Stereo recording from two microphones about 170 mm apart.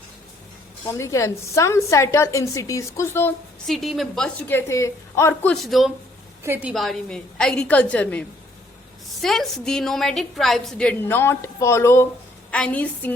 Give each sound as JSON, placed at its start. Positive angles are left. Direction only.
{"t": 0.9, "sound": "a woman's voice", "side_deg": 15}
{"t": 3.7, "sound": "a woman's voice", "side_deg": 0}
{"t": 5.6, "sound": "a woman's voice", "side_deg": 0}
{"t": 6.4, "sound": "a woman's voice", "side_deg": -10}
{"t": 6.7, "sound": "a woman's voice", "side_deg": 0}
{"t": 9.2, "sound": "a woman's voice", "side_deg": 0}